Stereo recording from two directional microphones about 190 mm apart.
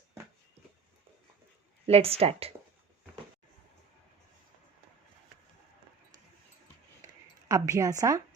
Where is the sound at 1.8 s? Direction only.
30° right (ahead or behind).